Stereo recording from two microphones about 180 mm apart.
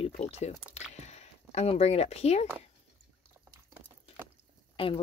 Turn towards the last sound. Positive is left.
turn(degrees=30)  # may be behind; listen again after turning